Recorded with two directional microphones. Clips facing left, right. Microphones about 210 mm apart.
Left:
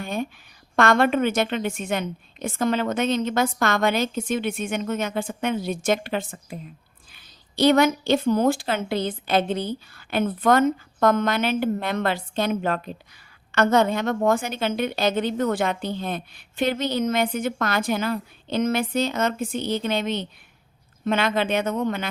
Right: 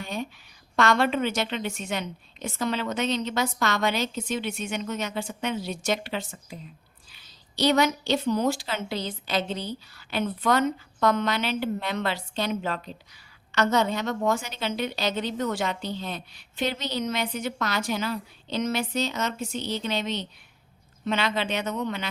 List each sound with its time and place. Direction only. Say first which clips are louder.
0.0 s a woman's voice: left 4 dB; 55° left (ahead or behind)